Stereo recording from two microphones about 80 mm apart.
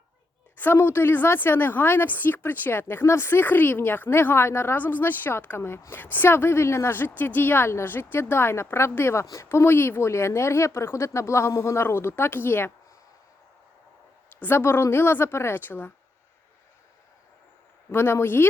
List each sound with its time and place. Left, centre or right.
0.5 s speech: left
14.3 s speech: left
17.9 s speech: left